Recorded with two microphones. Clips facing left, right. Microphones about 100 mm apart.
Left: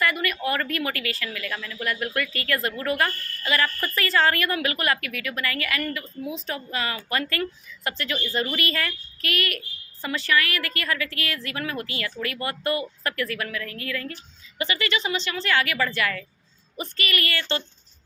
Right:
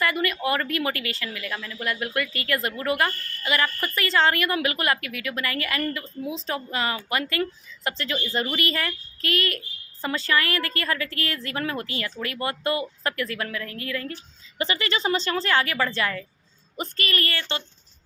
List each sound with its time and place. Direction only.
0.0 s speech: 25° right (ahead or behind)